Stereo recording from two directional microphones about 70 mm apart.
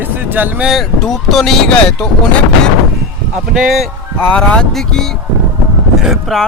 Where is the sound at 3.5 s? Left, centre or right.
Centre.